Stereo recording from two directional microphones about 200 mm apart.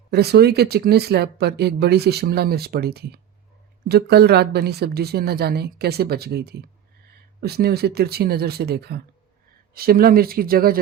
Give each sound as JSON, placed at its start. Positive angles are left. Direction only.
{"t": 0.1, "sound": "speech", "side_deg": -55}